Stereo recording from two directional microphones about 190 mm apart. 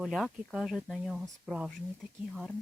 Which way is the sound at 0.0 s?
Centre (ahead or behind).